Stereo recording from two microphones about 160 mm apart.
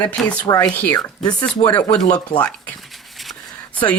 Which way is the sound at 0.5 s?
10° left (ahead or behind).